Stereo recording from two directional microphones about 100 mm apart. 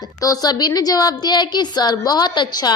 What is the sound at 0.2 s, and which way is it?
A woman's voice, 40° left (ahead or behind).